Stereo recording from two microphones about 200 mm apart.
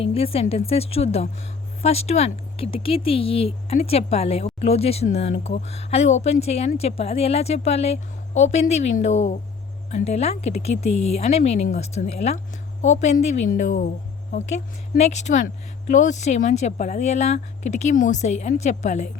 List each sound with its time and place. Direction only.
0.0 s speech: 30° left (ahead or behind)
14.9 s speech: 35° left (ahead or behind)